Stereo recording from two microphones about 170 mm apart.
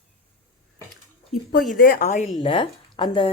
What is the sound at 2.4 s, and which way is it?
Speech, 35° left (ahead or behind).